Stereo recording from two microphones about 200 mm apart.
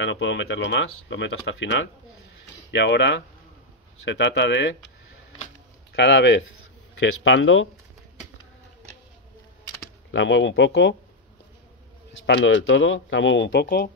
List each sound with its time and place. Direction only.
0.0 s speech: 65° left (ahead or behind)
5.9 s speech: 65° left (ahead or behind)
10.1 s speech: 70° left (ahead or behind)
12.3 s speech: 60° left (ahead or behind)